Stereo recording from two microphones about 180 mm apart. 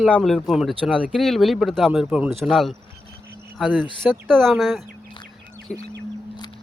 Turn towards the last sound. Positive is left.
turn(degrees=5)  # may be behind; listen again after turning